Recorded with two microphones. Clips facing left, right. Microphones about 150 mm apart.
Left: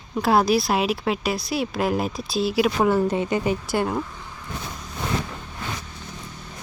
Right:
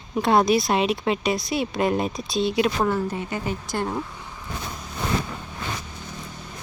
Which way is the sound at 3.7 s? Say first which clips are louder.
Left 3 dB; 5° left (ahead or behind).